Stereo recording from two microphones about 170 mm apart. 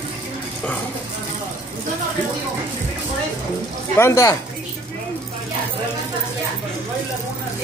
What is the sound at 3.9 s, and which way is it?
Speech, 15° left (ahead or behind).